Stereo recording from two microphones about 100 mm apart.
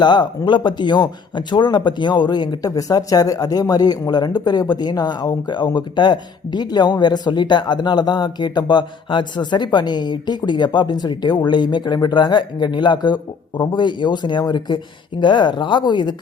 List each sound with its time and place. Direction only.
0.0 s speech: 45° left (ahead or behind)